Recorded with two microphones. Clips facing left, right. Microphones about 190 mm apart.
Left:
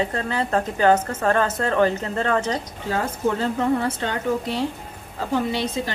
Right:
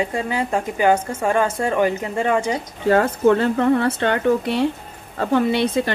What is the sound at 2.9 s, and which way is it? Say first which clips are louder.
A woman's voice: right 8 dB; 65° right (ahead or behind).